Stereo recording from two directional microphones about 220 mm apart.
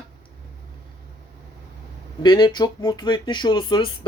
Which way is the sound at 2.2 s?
20° left (ahead or behind).